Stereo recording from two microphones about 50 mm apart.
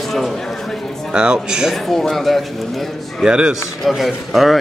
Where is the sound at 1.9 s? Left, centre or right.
Centre.